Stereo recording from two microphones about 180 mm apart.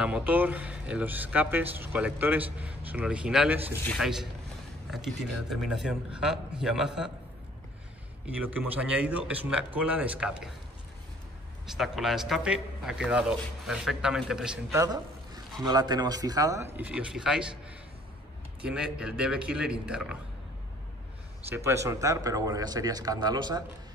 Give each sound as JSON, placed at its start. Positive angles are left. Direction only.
{"t": 0.0, "sound": "speech", "side_deg": -5}
{"t": 3.8, "sound": "speech", "side_deg": 0}
{"t": 8.3, "sound": "speech", "side_deg": -10}
{"t": 11.7, "sound": "speech", "side_deg": 0}
{"t": 14.7, "sound": "a man's voice", "side_deg": -20}
{"t": 16.7, "sound": "speech", "side_deg": -5}
{"t": 21.5, "sound": "speech", "side_deg": -15}